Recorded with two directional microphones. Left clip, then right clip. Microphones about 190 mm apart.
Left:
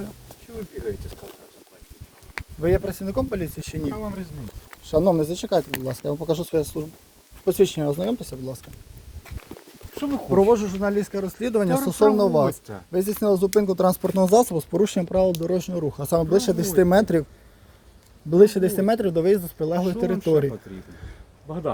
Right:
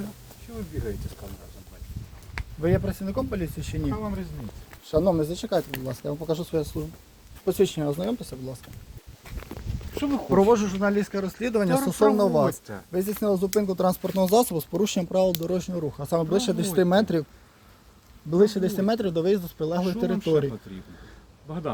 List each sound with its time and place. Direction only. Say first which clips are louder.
2.6 s speech: left 3 dB; 50° left (ahead or behind)
5.8 s speech: left 4 dB; 60° left (ahead or behind)
7.4 s speech: left 3 dB; 35° left (ahead or behind)
10.2 s speech: left 2 dB; 15° left (ahead or behind)
15.4 s speech: left 3 dB; 30° left (ahead or behind)
16.3 s speech: left 4 dB; 30° left (ahead or behind)
18.3 s speech: left 5 dB; 30° left (ahead or behind)
21.4 s speech: left 4 dB; 5° right (ahead or behind)